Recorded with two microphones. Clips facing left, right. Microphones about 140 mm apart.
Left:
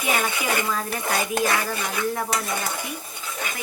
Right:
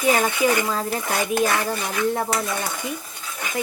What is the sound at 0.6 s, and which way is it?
Speech, 25° right (ahead or behind).